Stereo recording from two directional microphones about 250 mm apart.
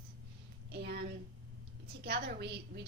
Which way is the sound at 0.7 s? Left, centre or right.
Right.